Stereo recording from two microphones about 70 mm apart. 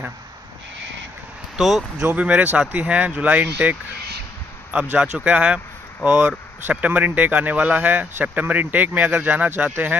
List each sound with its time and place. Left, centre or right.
1.6 s speech: centre
2.0 s speech: right
4.9 s speech: centre
6.7 s speech: right